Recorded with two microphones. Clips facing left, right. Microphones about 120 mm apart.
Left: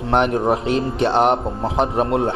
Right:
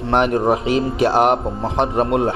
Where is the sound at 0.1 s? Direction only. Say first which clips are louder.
Right 1 dB; centre (ahead or behind).